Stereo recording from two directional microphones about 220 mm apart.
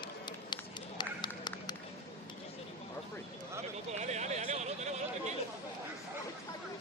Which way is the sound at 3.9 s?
30° right (ahead or behind).